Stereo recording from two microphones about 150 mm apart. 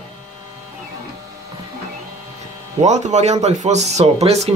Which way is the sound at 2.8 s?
50° right (ahead or behind).